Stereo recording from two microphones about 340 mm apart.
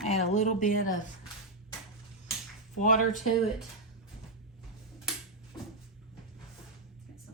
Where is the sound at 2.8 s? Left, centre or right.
Left.